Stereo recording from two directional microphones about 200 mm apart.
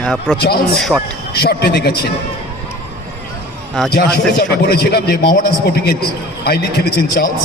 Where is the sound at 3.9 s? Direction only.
50° left (ahead or behind).